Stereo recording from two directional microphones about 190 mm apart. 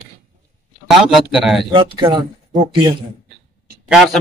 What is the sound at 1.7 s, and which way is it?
Speech, 25° right (ahead or behind).